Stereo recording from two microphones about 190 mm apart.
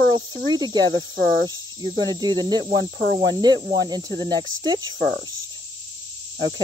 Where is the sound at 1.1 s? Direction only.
45° right (ahead or behind).